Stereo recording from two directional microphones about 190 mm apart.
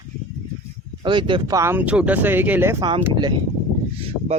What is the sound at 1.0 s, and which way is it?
Speech, 25° right (ahead or behind).